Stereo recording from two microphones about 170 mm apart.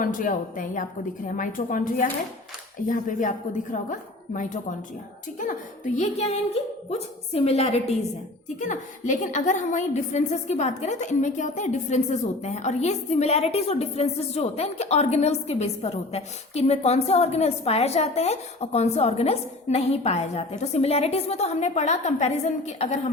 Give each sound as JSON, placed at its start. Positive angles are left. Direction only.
{"t": 0.0, "sound": "a woman's voice", "side_deg": 55}